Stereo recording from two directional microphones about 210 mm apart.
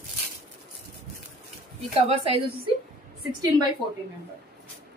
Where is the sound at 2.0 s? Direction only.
25° right (ahead or behind).